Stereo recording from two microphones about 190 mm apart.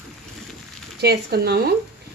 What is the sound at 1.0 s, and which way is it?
Speech, 60° right (ahead or behind).